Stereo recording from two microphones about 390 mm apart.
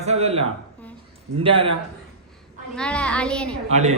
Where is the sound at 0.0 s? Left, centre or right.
Centre.